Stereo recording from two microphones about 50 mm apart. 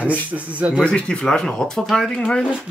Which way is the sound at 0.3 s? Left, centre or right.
Right.